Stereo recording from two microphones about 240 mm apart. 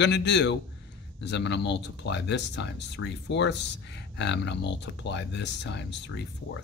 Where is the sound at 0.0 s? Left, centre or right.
Left.